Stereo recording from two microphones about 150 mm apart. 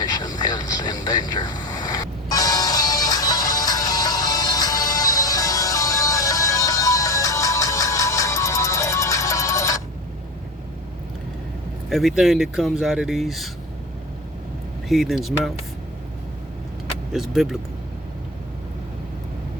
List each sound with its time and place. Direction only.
0.0 s vehicle: 30° left (ahead or behind)
11.9 s speech: centre (ahead or behind)
14.8 s speech: centre (ahead or behind)
17.1 s speech: centre (ahead or behind)